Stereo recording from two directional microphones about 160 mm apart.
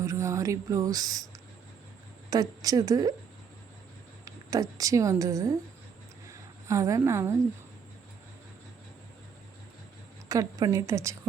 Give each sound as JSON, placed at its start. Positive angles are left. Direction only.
{"t": 0.0, "sound": "speech", "side_deg": -20}
{"t": 2.3, "sound": "a woman's voice", "side_deg": -20}
{"t": 4.3, "sound": "speech", "side_deg": -20}
{"t": 6.7, "sound": "a woman's voice", "side_deg": -20}
{"t": 10.2, "sound": "a woman's voice", "side_deg": -20}